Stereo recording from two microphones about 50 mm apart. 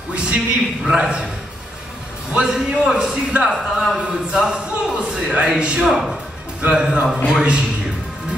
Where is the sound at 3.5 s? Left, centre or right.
Centre.